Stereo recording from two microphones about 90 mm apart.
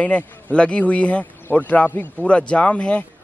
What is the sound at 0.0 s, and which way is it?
A man's voice, 15° left (ahead or behind).